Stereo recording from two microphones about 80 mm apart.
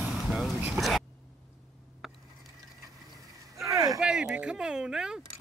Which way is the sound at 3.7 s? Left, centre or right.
Right.